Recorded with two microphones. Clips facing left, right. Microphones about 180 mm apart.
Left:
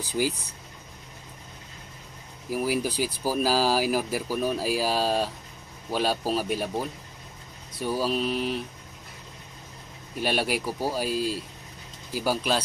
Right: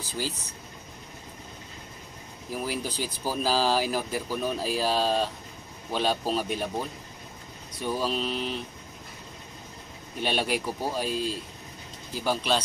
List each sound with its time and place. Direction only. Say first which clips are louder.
0.2 s speech: left 6 dB; 10° left (ahead or behind)
2.5 s speech: left 5 dB; 10° left (ahead or behind)
10.2 s speech: left 1 dB; 5° left (ahead or behind)